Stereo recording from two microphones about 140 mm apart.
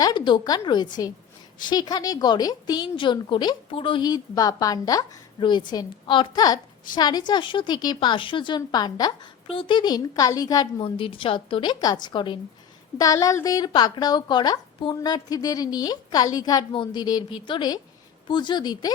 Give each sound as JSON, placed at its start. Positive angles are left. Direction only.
{"t": 0.0, "sound": "speech", "side_deg": 35}
{"t": 9.5, "sound": "speech", "side_deg": 40}